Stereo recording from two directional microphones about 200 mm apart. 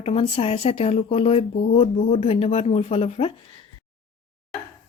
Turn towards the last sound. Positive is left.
turn(degrees=30)  # may be behind; listen again after turning